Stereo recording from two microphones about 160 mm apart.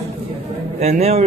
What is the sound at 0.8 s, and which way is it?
Speech, 40° right (ahead or behind).